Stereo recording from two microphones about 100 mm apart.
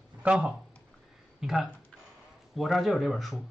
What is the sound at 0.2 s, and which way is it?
Speech, 10° right (ahead or behind).